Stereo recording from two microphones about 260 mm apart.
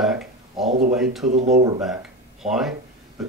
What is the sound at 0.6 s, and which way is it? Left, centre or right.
Speech, right.